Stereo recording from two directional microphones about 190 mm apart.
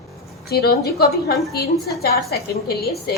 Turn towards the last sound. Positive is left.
turn(degrees=55)  # may be behind; listen again after turning